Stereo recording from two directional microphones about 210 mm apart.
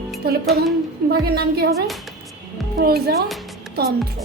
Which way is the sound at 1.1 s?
50° right (ahead or behind).